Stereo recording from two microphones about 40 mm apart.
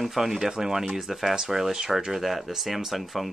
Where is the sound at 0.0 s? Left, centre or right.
Centre.